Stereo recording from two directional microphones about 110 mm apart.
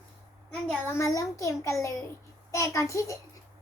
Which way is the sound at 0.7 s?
20° left (ahead or behind).